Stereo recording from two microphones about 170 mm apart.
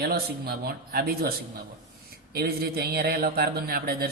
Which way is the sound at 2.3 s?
65° right (ahead or behind).